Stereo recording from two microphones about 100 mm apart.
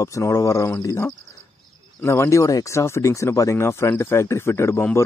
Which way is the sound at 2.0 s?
25° left (ahead or behind).